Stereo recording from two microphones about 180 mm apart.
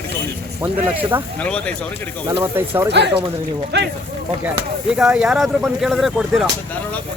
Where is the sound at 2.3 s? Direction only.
10° right (ahead or behind).